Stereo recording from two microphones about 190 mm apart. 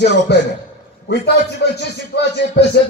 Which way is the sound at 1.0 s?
60° left (ahead or behind).